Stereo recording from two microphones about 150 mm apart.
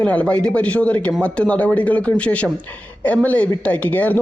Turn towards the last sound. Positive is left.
turn(degrees=10)  # may be behind; listen again after turning